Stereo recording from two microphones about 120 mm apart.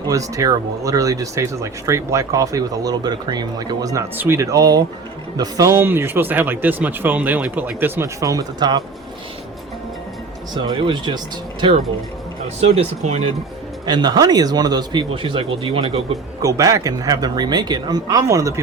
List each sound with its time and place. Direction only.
0.1 s speech: 30° right (ahead or behind)
3.9 s speech: 25° right (ahead or behind)
10.5 s speech: 40° right (ahead or behind)
12.5 s speech: 60° right (ahead or behind)
13.8 s speech: 35° right (ahead or behind)
16.4 s speech: 30° right (ahead or behind)